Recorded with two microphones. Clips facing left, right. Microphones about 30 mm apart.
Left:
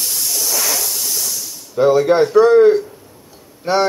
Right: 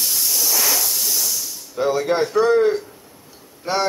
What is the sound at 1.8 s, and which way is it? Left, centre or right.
A man's voice, centre.